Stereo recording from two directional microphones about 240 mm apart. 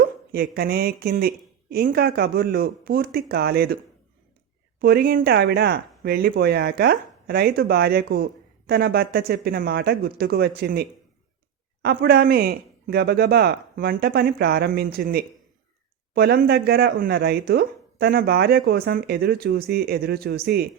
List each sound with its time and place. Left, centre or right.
0.3 s speech: right
4.8 s speech: right